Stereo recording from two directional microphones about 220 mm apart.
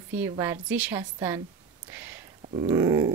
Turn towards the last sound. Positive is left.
turn(degrees=-15)  # may be behind; listen again after turning